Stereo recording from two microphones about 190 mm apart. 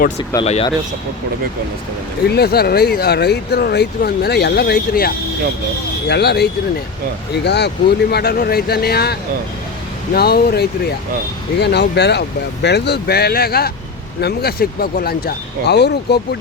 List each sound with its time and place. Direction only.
0.2 s speech: 30° left (ahead or behind)
2.3 s speech: 55° left (ahead or behind)